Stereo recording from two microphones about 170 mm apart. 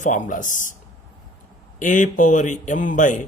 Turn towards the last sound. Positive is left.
turn(degrees=50)  # may be behind; listen again after turning